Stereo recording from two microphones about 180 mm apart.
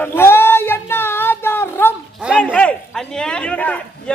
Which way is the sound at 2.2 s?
5° right (ahead or behind).